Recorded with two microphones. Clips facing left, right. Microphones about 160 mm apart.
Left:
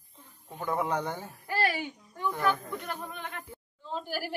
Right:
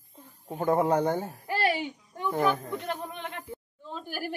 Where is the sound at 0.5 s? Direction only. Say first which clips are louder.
Right 6 dB; 45° right (ahead or behind).